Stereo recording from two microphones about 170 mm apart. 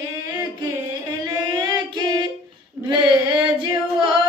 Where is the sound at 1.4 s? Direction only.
25° right (ahead or behind).